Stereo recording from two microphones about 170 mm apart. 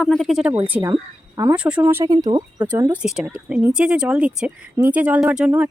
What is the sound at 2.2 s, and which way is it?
Speech, 25° right (ahead or behind).